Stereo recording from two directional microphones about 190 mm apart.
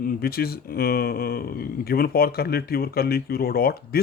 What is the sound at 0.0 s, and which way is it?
Speech, 50° left (ahead or behind).